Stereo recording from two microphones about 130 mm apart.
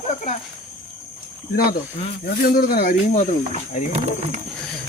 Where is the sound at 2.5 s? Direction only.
90° left.